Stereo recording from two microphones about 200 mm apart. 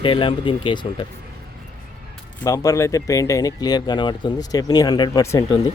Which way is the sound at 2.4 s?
15° left (ahead or behind).